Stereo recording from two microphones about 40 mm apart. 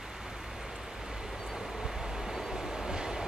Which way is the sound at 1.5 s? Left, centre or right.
Centre.